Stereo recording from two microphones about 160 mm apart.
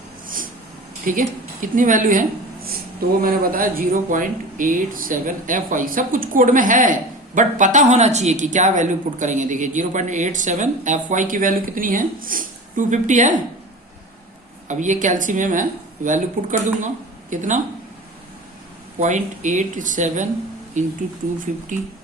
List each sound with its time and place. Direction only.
1.1 s speech: 55° right (ahead or behind)
3.2 s speech: 65° right (ahead or behind); by 13.3 s 50° right (ahead or behind)
14.7 s speech: 50° right (ahead or behind)
18.9 s speech: 50° right (ahead or behind)